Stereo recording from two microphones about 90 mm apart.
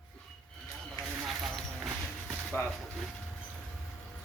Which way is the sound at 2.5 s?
25° left (ahead or behind).